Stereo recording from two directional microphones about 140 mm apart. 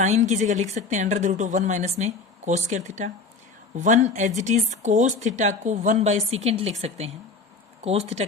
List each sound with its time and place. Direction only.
0.0 s a woman's voice: 55° right (ahead or behind)